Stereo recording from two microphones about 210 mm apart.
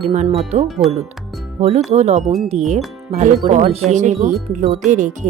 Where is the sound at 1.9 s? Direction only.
30° right (ahead or behind).